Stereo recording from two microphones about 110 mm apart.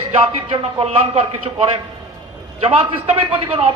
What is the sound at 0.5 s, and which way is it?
A man's voice, 65° right (ahead or behind).